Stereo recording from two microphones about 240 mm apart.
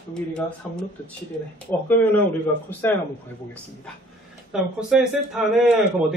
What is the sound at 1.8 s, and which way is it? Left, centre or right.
Speech, centre.